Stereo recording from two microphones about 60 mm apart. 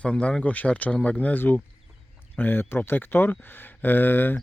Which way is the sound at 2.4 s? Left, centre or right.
Left.